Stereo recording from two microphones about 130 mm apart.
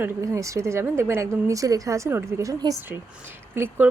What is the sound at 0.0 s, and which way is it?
Speech, 20° right (ahead or behind).